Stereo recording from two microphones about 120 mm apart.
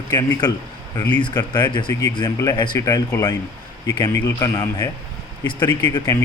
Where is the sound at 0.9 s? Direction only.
20° left (ahead or behind).